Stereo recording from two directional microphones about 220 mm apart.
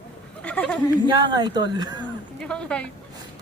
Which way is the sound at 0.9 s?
20° right (ahead or behind).